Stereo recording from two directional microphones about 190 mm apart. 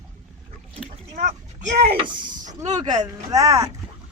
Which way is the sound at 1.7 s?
40° right (ahead or behind).